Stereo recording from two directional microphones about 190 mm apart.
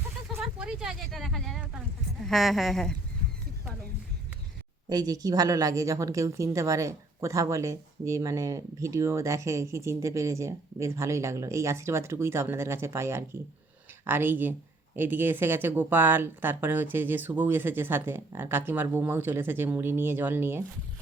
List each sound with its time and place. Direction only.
0.3 s a sound: 5° right (ahead or behind)
2.2 s a woman's voice: centre (ahead or behind)
4.9 s speech: 20° right (ahead or behind)